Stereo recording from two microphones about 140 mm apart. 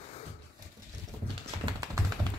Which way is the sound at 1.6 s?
30° right (ahead or behind).